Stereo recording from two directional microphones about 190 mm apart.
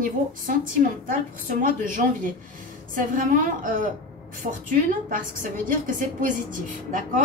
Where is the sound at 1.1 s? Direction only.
45° right (ahead or behind).